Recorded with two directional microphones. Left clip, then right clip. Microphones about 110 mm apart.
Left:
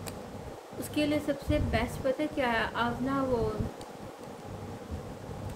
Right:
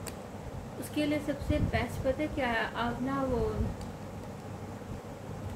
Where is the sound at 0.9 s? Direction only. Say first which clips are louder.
Left 2 dB; 25° left (ahead or behind).